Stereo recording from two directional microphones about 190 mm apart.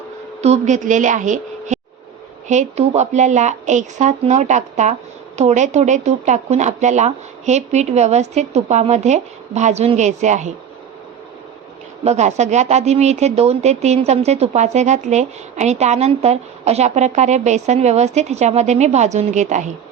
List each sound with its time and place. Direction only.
0.4 s a woman's voice: 35° right (ahead or behind)
12.0 s speech: 35° right (ahead or behind)